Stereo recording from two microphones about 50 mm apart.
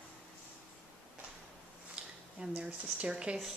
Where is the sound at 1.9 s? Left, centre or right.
Right.